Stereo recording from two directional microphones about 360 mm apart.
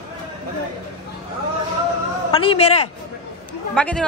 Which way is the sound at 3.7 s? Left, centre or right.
Centre.